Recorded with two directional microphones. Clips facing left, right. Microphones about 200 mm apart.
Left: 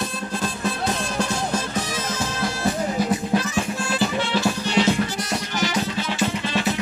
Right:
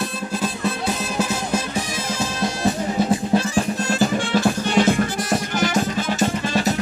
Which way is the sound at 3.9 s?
50° right (ahead or behind).